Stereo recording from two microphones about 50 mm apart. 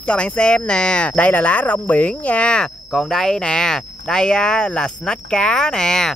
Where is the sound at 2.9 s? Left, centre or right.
Centre.